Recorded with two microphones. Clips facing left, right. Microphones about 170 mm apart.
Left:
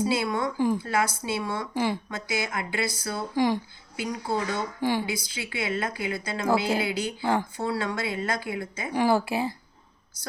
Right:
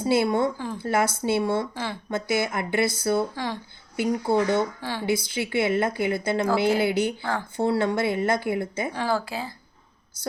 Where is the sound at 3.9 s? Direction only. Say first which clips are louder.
Right 6 dB; 60° right (ahead or behind).